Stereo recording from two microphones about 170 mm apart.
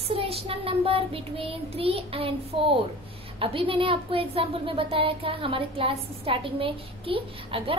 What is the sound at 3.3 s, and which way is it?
A woman's voice, 30° right (ahead or behind).